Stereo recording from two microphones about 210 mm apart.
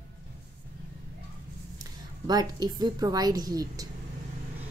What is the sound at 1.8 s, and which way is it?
A woman's voice, 20° right (ahead or behind).